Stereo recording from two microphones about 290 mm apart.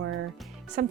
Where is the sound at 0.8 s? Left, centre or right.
Right.